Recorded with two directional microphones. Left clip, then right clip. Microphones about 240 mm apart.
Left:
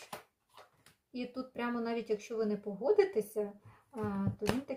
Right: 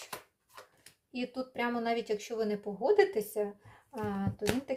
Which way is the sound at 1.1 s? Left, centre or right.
Right.